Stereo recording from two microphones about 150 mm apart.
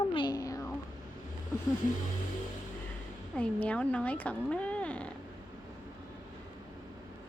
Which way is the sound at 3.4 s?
10° left (ahead or behind).